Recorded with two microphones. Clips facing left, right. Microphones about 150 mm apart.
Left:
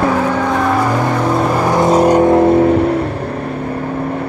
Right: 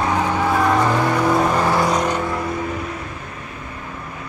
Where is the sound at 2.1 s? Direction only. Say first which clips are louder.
Left 14 dB; 60° left (ahead or behind).